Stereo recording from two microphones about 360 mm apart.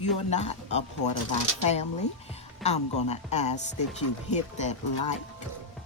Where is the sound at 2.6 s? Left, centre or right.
Centre.